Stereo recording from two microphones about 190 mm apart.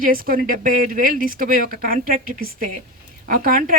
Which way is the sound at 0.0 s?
50° right (ahead or behind).